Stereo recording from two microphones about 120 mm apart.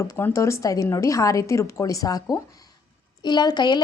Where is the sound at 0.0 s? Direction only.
25° left (ahead or behind).